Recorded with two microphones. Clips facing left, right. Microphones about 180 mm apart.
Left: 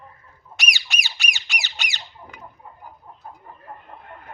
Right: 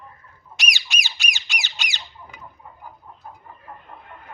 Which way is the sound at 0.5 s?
60° left (ahead or behind).